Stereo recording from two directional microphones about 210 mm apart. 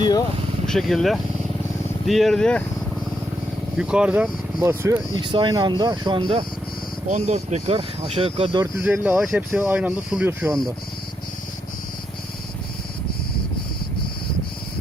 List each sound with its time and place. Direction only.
0.0 s vehicle: 20° left (ahead or behind)
0.7 s speech: centre (ahead or behind)
3.8 s speech: 5° right (ahead or behind)
5.1 s speech: 25° right (ahead or behind)
8.8 s speech: 5° right (ahead or behind)